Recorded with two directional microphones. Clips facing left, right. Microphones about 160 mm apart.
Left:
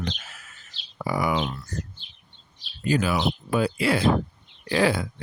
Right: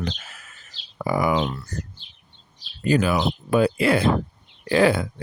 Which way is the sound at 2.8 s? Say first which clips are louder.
Right 3 dB; 60° right (ahead or behind).